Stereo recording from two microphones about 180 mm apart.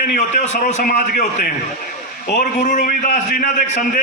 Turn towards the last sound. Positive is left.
turn(degrees=45)  # may be behind; listen again after turning